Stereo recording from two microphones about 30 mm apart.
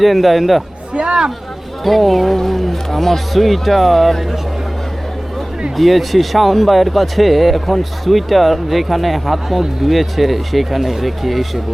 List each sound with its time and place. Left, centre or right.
0.0 s speech: centre
0.9 s speech: right
1.8 s speech: centre
5.7 s speech: centre